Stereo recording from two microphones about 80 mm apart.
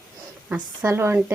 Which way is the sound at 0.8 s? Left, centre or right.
Right.